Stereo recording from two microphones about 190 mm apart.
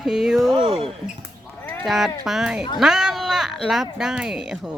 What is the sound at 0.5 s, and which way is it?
Speech, 30° right (ahead or behind).